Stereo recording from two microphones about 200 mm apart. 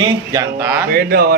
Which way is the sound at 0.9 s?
50° right (ahead or behind).